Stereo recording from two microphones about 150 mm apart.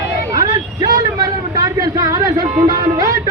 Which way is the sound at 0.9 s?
25° right (ahead or behind).